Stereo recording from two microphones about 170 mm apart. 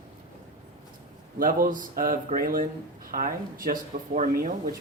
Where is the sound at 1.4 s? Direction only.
55° right (ahead or behind).